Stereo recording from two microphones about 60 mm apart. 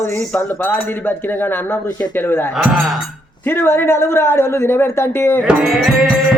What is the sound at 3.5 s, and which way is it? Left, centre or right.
A man's voice, left.